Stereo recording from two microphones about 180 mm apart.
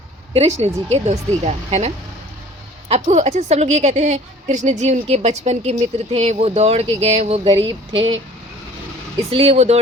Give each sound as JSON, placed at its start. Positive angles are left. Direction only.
{"t": 0.3, "sound": "a woman's voice", "side_deg": -35}
{"t": 2.9, "sound": "a woman's voice", "side_deg": -35}
{"t": 9.3, "sound": "a woman's voice", "side_deg": -35}